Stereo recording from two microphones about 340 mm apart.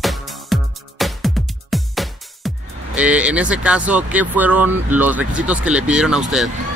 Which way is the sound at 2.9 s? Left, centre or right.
Centre.